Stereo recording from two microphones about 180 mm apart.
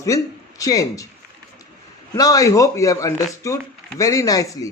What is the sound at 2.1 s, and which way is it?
A man's voice, 20° left (ahead or behind).